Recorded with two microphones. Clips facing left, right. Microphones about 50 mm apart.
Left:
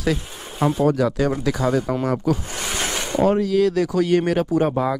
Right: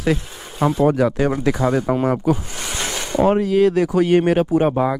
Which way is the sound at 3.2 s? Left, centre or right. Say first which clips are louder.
Right 2 dB; right.